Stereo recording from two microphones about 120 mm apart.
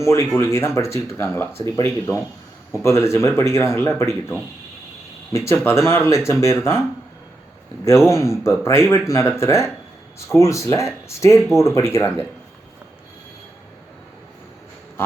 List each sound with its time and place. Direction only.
0.0 s speech: 20° left (ahead or behind)
7.9 s speech: 20° left (ahead or behind)